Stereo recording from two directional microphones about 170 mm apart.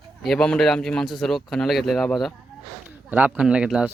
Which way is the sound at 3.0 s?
10° right (ahead or behind).